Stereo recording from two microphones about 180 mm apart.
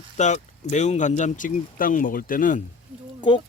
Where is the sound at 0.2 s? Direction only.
40° left (ahead or behind).